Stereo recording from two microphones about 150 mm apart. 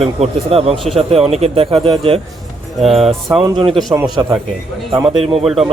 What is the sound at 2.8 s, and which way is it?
Speech, centre (ahead or behind).